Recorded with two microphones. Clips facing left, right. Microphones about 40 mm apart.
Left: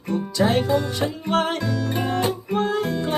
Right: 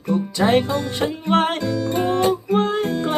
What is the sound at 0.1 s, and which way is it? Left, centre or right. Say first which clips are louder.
Music: right 3 dB; right.